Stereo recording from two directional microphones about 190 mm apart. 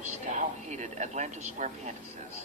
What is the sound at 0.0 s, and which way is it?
A man's voice, 40° right (ahead or behind).